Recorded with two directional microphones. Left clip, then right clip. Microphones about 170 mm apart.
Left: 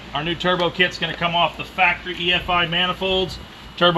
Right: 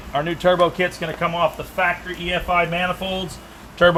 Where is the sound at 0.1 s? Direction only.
45° right (ahead or behind).